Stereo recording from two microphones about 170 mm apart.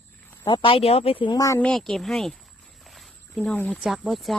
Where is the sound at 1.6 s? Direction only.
5° left (ahead or behind).